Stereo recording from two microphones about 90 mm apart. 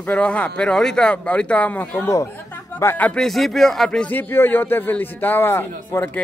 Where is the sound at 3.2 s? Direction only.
Centre (ahead or behind).